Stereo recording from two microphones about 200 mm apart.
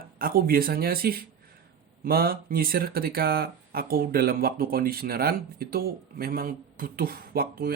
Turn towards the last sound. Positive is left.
turn(degrees=-50)  # may be behind; listen again after turning